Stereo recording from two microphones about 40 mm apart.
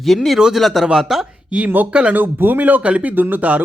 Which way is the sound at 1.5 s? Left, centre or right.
Right.